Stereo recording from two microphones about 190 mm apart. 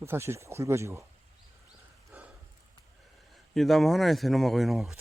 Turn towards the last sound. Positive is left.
turn(degrees=0)  # may be behind; listen again after turning